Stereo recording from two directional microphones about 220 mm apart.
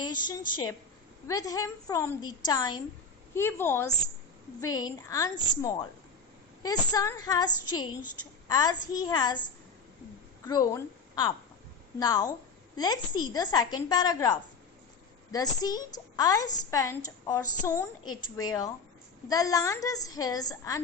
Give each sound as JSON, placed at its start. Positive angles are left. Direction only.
{"t": 0.0, "sound": "a woman's voice", "side_deg": 20}
{"t": 6.6, "sound": "a woman's voice", "side_deg": 15}
{"t": 10.4, "sound": "a woman's voice", "side_deg": 15}